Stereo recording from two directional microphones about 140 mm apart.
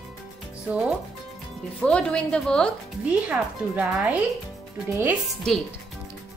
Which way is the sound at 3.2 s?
10° right (ahead or behind).